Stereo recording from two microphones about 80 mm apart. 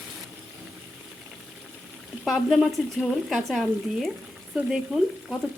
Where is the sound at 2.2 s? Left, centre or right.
Centre.